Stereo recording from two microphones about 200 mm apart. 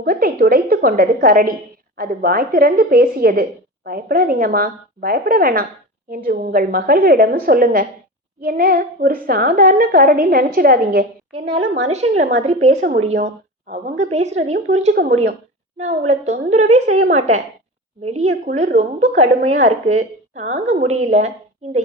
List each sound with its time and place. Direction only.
0.0 s a woman's voice: 45° right (ahead or behind)
11.9 s a woman's voice: 35° right (ahead or behind)